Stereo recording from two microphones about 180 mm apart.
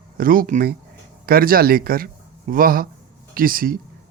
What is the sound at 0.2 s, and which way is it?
Speech, 50° right (ahead or behind).